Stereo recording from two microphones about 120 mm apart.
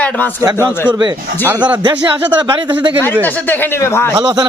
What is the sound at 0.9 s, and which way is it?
Speech, 35° right (ahead or behind).